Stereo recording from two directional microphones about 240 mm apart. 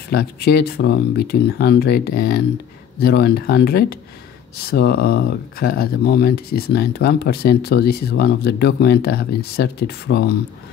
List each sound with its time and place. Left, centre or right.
0.1 s speech: left